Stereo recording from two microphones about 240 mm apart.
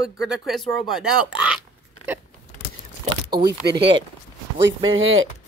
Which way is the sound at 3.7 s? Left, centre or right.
Right.